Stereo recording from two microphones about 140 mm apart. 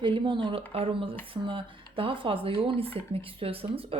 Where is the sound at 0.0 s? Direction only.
35° right (ahead or behind).